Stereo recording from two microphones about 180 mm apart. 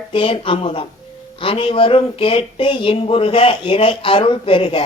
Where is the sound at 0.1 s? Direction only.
30° left (ahead or behind).